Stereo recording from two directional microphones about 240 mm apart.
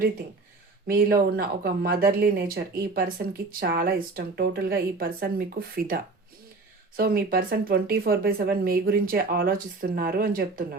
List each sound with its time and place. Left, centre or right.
0.9 s speech: right